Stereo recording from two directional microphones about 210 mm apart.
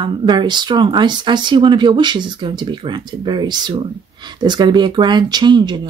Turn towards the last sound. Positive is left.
turn(degrees=-20)  # may be behind; listen again after turning